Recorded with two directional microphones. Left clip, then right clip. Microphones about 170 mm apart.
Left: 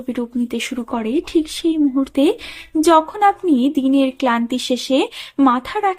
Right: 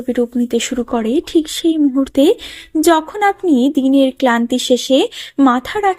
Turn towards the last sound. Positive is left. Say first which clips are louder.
# right 3 dB
turn(degrees=-25)  # may be behind; listen again after turning